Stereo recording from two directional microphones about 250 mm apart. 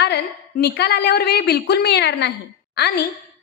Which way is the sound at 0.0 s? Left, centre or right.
Left.